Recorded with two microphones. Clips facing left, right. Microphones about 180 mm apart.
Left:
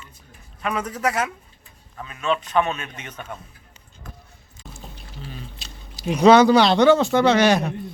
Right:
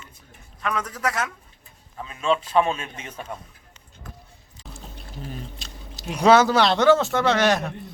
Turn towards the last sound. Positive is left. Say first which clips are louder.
# left 4 dB
turn(degrees=0)  # may be behind; listen again after turning